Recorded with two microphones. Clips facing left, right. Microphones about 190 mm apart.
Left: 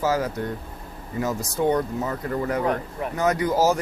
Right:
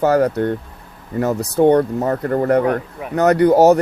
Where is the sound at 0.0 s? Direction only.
65° right (ahead or behind).